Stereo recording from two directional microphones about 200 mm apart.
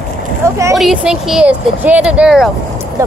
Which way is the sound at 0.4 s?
15° right (ahead or behind).